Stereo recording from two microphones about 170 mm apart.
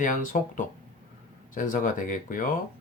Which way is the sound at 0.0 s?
50° left (ahead or behind).